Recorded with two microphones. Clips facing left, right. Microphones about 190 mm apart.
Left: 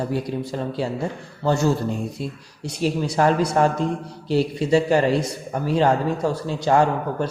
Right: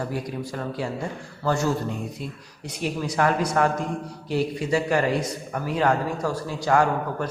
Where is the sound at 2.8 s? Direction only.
30° left (ahead or behind).